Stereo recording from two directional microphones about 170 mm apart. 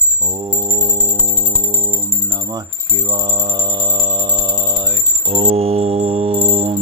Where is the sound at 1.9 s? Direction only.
25° right (ahead or behind).